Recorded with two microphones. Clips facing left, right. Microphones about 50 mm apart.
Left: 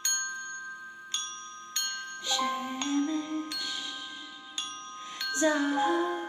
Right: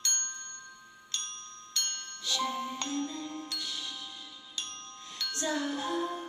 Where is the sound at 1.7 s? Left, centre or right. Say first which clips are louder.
Left 2 dB; left.